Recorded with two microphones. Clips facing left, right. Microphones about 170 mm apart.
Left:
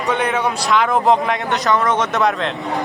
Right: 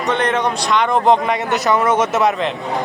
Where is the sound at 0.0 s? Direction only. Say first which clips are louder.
Right 1 dB; 10° left (ahead or behind).